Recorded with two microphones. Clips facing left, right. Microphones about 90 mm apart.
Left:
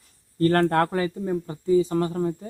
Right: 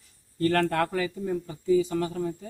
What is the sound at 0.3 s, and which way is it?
Speech, 40° left (ahead or behind).